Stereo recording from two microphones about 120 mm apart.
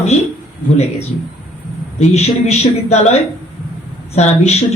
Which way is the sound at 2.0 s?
65° left (ahead or behind).